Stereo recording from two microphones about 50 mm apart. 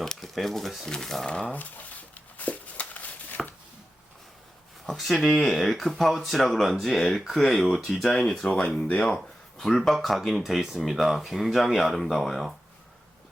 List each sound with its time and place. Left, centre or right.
0.2 s speech: centre
1.5 s a sound: left
4.9 s speech: centre
8.4 s speech: centre
9.1 s speech: centre